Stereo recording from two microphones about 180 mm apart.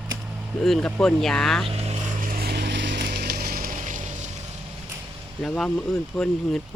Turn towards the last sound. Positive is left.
turn(degrees=0)  # may be behind; listen again after turning